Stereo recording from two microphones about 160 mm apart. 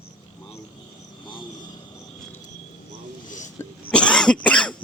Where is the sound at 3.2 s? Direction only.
50° left (ahead or behind).